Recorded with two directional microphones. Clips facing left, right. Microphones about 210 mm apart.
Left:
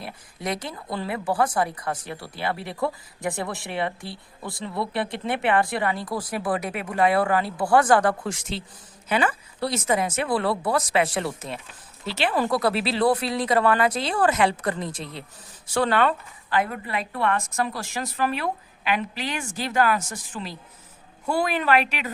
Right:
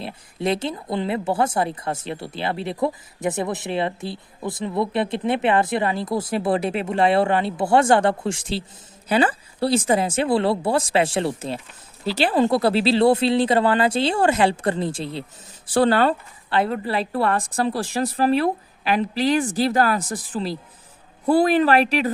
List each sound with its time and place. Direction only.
0.0 s a woman's voice: 25° right (ahead or behind)